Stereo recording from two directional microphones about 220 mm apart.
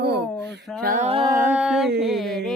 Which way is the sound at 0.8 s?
35° right (ahead or behind).